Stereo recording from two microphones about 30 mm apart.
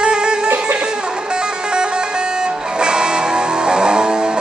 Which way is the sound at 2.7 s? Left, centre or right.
Right.